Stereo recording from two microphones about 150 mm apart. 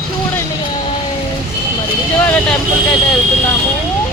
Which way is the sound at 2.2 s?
10° left (ahead or behind).